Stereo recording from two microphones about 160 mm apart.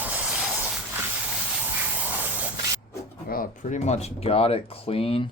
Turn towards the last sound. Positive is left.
turn(degrees=35)  # may be behind; listen again after turning